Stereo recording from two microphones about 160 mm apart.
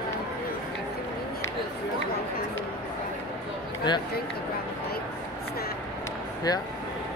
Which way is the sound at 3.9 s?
25° left (ahead or behind).